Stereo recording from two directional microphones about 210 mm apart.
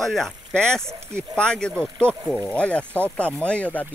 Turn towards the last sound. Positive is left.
turn(degrees=5)  # may be behind; listen again after turning